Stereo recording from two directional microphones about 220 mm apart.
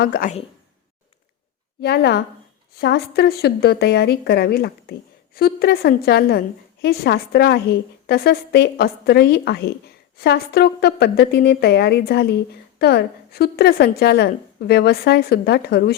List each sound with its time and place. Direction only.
0.0 s speech: 40° left (ahead or behind)
1.8 s a woman's voice: 50° left (ahead or behind)